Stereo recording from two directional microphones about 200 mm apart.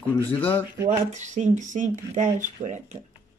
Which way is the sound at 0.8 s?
35° right (ahead or behind).